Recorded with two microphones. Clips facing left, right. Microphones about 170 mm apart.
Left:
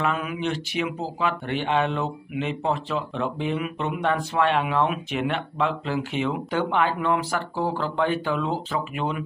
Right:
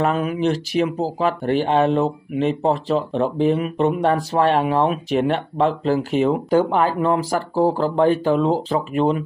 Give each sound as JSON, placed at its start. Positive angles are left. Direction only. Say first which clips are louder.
{"t": 0.0, "sound": "speech", "louder": "right 7 dB", "side_deg": -35}